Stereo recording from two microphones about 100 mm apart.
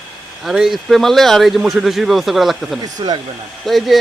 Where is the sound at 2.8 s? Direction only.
45° right (ahead or behind).